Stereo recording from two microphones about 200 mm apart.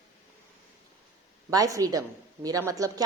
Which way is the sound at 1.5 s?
15° right (ahead or behind).